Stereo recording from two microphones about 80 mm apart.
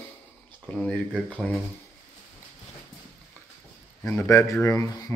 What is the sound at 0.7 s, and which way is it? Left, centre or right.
Speech, centre.